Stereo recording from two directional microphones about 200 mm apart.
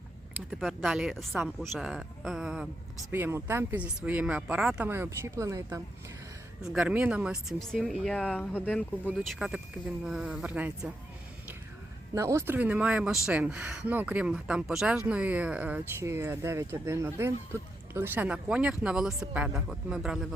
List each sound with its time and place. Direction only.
0.5 s speech: centre (ahead or behind)
6.6 s speech: 5° right (ahead or behind)
9.0 s speech: 5° right (ahead or behind)
12.1 s speech: 15° right (ahead or behind)